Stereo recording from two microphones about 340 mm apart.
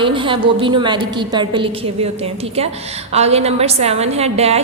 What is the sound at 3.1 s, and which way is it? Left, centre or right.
A woman's voice, centre.